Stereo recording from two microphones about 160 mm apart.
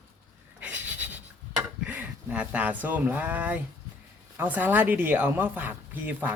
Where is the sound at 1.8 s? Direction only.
10° right (ahead or behind).